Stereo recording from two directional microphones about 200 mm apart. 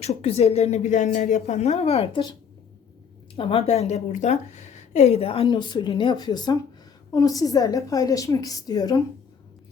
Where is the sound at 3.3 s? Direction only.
30° left (ahead or behind).